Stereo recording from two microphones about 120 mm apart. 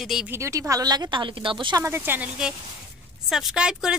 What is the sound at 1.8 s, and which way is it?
Speech, 20° right (ahead or behind).